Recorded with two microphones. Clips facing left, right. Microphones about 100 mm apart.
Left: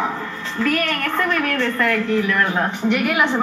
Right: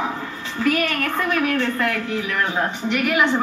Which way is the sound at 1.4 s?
15° right (ahead or behind).